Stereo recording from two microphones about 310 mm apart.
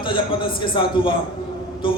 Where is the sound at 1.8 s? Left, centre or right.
Centre.